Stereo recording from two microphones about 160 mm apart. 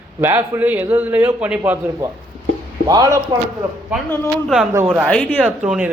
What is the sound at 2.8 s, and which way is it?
Speech, 25° right (ahead or behind).